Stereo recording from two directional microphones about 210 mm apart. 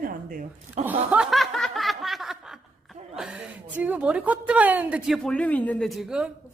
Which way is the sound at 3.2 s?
5° right (ahead or behind).